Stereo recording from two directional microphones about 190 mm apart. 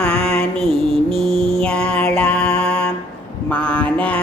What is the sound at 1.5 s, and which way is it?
Music, 5° left (ahead or behind).